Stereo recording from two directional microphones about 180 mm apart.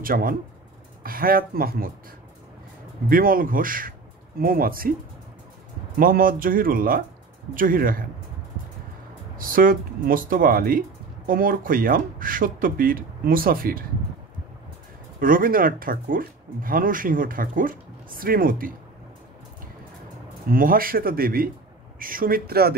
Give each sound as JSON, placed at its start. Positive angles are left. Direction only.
{"t": 0.0, "sound": "speech", "side_deg": -50}
{"t": 3.1, "sound": "speech", "side_deg": -50}
{"t": 5.9, "sound": "speech", "side_deg": -50}
{"t": 9.4, "sound": "speech", "side_deg": -50}
{"t": 15.1, "sound": "speech", "side_deg": -50}
{"t": 20.5, "sound": "speech", "side_deg": -50}